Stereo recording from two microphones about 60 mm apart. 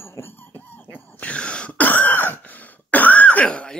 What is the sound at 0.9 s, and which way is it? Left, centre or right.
Throat clearing, left.